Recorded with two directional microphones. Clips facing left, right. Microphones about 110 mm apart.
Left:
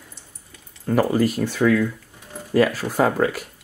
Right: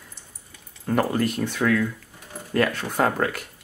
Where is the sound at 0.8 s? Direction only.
Centre (ahead or behind).